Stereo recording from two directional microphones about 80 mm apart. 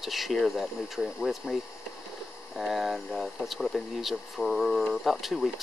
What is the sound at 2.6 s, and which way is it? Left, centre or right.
Speech, centre.